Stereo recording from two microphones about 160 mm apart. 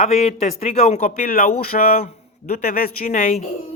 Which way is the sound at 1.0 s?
55° left (ahead or behind).